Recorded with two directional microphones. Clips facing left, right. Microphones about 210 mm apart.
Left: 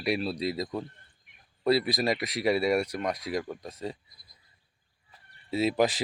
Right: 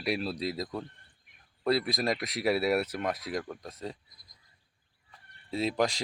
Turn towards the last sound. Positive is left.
turn(degrees=5)  # may be behind; listen again after turning